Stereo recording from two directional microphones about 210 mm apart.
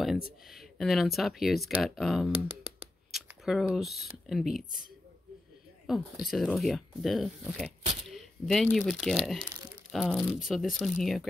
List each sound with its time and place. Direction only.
0.5 s speech: centre (ahead or behind)
3.1 s a sound: centre (ahead or behind)
4.3 s speech: centre (ahead or behind)
5.9 s speech: centre (ahead or behind)